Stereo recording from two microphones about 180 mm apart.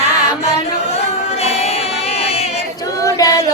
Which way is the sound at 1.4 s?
35° left (ahead or behind).